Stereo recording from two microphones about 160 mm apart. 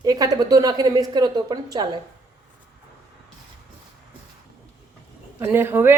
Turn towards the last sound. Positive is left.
turn(degrees=-15)  # may be behind; listen again after turning